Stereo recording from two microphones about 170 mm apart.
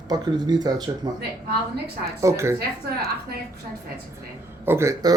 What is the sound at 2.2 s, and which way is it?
Speech, 15° right (ahead or behind).